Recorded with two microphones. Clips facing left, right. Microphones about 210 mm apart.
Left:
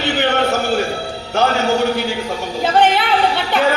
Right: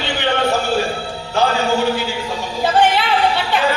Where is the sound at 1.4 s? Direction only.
45° left (ahead or behind).